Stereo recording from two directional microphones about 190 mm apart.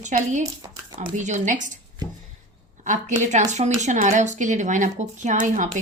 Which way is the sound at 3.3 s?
40° right (ahead or behind).